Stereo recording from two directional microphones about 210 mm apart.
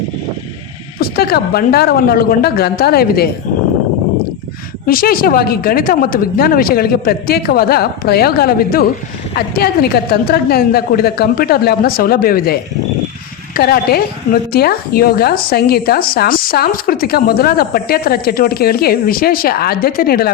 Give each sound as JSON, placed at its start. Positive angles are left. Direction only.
{"t": 0.9, "sound": "a woman's voice", "side_deg": 45}
{"t": 4.9, "sound": "a woman's voice", "side_deg": 45}